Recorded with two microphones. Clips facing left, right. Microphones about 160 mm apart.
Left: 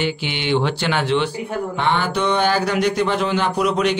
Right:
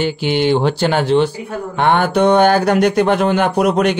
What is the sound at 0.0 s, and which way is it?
Speech, 40° right (ahead or behind).